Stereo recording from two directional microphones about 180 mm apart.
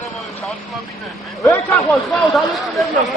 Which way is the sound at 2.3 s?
Centre (ahead or behind).